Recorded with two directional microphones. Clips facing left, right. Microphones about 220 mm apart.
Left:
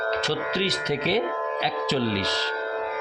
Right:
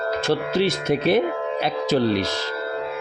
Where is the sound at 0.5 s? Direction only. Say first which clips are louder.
Right 5 dB; 50° right (ahead or behind).